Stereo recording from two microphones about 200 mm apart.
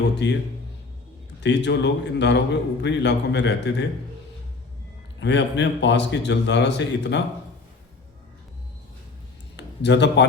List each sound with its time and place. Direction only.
0.0 s a man's voice: 60° left (ahead or behind)
1.4 s a man's voice: 60° left (ahead or behind)
5.2 s a man's voice: 60° left (ahead or behind)
9.6 s speech: 60° left (ahead or behind)